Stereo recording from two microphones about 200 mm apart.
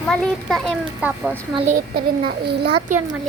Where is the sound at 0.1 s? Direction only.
Centre (ahead or behind).